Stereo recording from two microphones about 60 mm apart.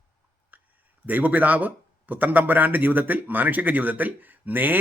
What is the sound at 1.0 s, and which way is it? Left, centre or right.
A man's voice, right.